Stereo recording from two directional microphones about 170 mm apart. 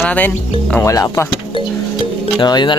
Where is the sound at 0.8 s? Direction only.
20° left (ahead or behind).